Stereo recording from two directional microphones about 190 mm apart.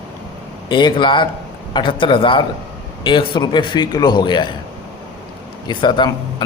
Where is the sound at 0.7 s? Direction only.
25° left (ahead or behind).